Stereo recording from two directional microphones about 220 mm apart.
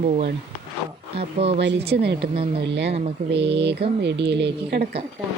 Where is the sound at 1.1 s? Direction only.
25° right (ahead or behind).